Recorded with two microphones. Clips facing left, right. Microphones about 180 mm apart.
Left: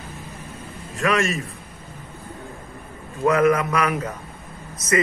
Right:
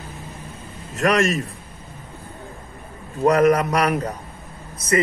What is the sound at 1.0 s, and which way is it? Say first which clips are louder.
Speech: right 3 dB; 40° right (ahead or behind).